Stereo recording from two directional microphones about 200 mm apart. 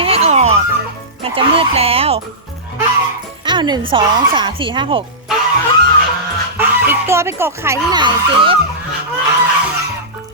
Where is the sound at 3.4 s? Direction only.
20° right (ahead or behind).